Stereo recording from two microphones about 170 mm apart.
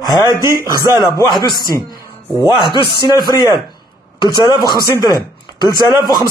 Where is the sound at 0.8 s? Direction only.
20° left (ahead or behind).